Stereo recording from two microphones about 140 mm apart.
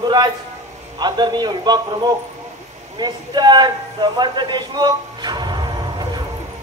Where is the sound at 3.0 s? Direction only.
30° right (ahead or behind).